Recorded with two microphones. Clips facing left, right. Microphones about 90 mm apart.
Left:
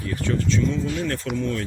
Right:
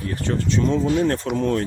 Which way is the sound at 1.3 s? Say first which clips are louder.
Right 5 dB; 45° right (ahead or behind).